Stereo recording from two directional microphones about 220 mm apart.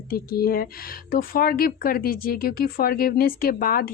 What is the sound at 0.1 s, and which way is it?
Speech, 40° left (ahead or behind).